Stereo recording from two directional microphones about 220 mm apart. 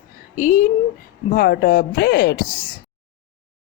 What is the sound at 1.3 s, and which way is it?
Speech, 45° left (ahead or behind).